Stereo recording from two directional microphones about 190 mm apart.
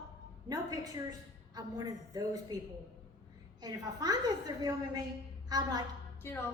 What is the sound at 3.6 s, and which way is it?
A woman's voice, 20° right (ahead or behind).